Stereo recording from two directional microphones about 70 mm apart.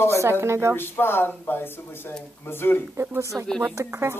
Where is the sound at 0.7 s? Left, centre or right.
Left.